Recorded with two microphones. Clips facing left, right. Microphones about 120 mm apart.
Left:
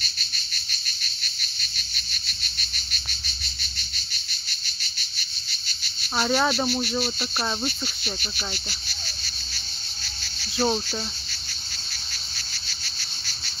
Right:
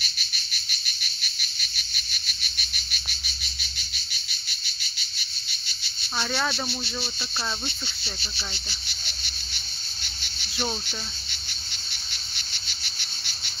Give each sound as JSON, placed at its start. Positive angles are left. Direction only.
{"t": 6.1, "sound": "speech", "side_deg": 25}
{"t": 8.8, "sound": "cricket", "side_deg": -20}
{"t": 10.6, "sound": "speech", "side_deg": 25}
{"t": 11.9, "sound": "cricket", "side_deg": -20}